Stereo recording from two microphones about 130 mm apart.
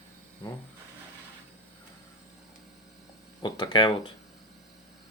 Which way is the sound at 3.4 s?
35° left (ahead or behind).